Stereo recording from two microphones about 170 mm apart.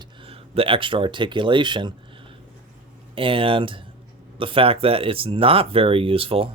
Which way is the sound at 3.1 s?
30° right (ahead or behind).